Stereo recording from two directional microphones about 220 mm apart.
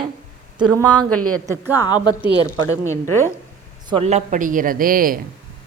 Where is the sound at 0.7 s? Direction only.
20° right (ahead or behind).